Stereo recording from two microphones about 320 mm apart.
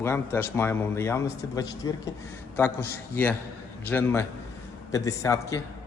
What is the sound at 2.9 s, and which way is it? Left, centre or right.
A man's voice, centre.